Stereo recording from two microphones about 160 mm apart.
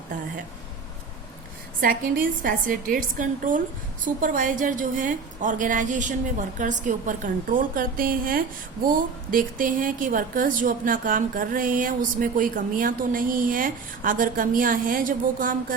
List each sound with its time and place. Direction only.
1.8 s speech: 60° right (ahead or behind)